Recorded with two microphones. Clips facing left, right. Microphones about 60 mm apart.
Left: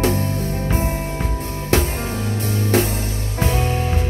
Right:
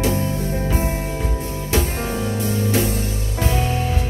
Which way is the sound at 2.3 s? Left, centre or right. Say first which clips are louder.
Left 3 dB; left.